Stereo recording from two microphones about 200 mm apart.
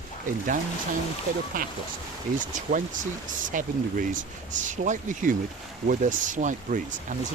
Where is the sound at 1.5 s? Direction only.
40° right (ahead or behind).